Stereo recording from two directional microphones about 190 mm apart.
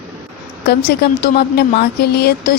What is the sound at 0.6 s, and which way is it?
A woman's voice, 55° left (ahead or behind).